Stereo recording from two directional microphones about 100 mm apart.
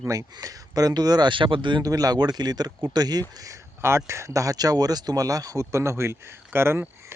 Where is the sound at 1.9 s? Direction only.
40° right (ahead or behind).